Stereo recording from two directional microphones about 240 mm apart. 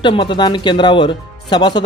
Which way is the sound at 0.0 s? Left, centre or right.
Centre.